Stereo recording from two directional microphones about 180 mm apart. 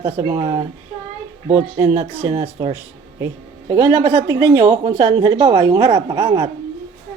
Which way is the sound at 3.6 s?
25° right (ahead or behind).